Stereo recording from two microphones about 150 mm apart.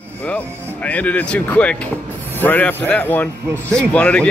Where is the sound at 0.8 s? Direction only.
10° left (ahead or behind).